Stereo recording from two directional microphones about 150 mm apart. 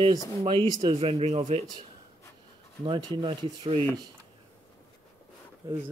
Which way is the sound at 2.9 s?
35° right (ahead or behind).